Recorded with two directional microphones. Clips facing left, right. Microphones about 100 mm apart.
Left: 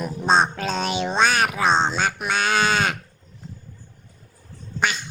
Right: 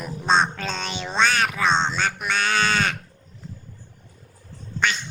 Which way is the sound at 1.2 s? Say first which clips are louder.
Even; 15° left (ahead or behind).